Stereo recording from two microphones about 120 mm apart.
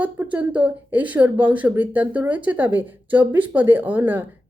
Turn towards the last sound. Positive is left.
turn(degrees=-15)  # may be behind; listen again after turning